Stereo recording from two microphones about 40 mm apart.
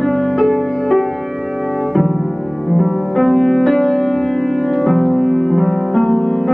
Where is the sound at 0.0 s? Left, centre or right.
Centre.